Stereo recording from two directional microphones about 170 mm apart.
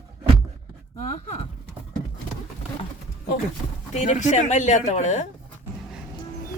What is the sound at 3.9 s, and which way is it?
Speech, 45° left (ahead or behind).